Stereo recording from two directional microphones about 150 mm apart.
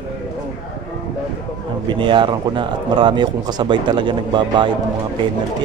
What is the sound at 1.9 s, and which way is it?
Speech, 30° right (ahead or behind).